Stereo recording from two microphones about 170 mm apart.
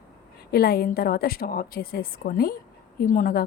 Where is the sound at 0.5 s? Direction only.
65° left (ahead or behind).